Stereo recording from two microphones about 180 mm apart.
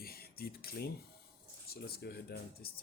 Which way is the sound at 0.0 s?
60° left (ahead or behind).